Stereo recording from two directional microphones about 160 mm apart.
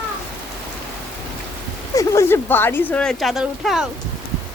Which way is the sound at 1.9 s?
20° left (ahead or behind).